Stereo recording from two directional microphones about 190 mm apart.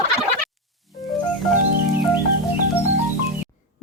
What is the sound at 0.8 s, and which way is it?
Music, centre (ahead or behind).